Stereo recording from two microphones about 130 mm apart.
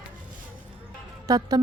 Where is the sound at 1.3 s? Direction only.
25° right (ahead or behind).